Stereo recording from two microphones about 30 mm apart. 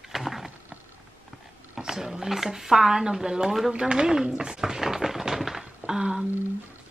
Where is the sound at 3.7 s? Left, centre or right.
Right; by 5.6 s centre.